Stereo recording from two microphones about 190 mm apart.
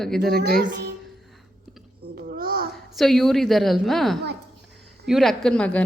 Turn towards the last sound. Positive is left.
turn(degrees=5)  # may be behind; listen again after turning